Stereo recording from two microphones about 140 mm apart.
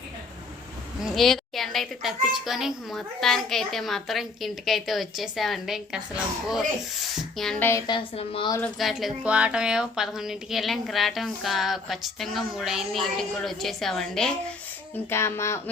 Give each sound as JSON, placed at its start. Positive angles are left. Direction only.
{"t": 1.1, "sound": "a woman's voice", "side_deg": 0}
{"t": 7.2, "sound": "speech", "side_deg": 0}
{"t": 7.6, "sound": "speech", "side_deg": 20}
{"t": 7.9, "sound": "a woman's voice", "side_deg": 40}
{"t": 8.6, "sound": "a woman's voice", "side_deg": 0}
{"t": 15.1, "sound": "speech", "side_deg": 20}